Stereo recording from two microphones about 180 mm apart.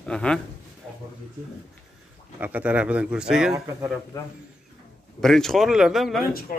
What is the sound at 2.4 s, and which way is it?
Speech, 10° right (ahead or behind).